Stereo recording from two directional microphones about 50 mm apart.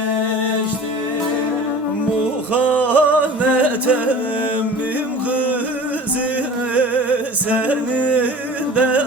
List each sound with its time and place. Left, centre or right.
2.9 s music: right
6.7 s music: right